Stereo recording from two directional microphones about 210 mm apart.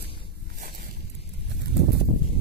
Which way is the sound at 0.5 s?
40° right (ahead or behind).